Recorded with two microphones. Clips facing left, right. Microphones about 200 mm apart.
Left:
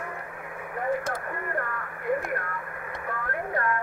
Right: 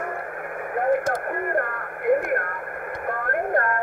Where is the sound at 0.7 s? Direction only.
60° right (ahead or behind).